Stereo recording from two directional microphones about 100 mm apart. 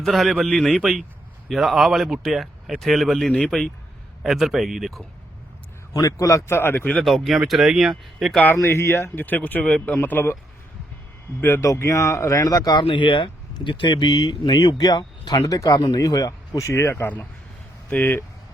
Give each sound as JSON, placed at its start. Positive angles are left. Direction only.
{"t": 0.0, "sound": "speech", "side_deg": 0}
{"t": 5.9, "sound": "speech", "side_deg": 35}
{"t": 7.0, "sound": "speech", "side_deg": 0}
{"t": 8.5, "sound": "speech", "side_deg": 30}
{"t": 11.3, "sound": "speech", "side_deg": 20}
{"t": 11.6, "sound": "speech", "side_deg": 35}
{"t": 12.8, "sound": "speech", "side_deg": 60}